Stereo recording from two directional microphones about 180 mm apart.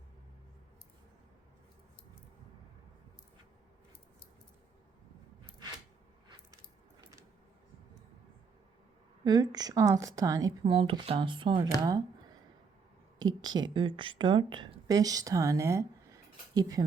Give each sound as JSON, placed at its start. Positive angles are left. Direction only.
{"t": 9.2, "sound": "a woman's voice", "side_deg": -20}
{"t": 10.7, "sound": "a woman's voice", "side_deg": -30}
{"t": 13.2, "sound": "a woman's voice", "side_deg": -25}